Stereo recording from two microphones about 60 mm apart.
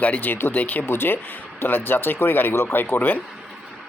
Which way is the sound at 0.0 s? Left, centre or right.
Left.